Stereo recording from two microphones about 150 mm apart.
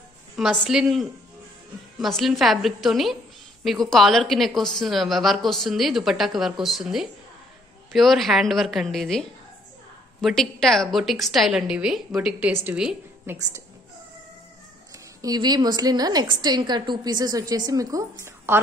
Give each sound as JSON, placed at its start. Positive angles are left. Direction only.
{"t": 0.4, "sound": "a woman's voice", "side_deg": -5}
{"t": 10.2, "sound": "a woman's voice", "side_deg": 0}
{"t": 15.2, "sound": "a woman's voice", "side_deg": -25}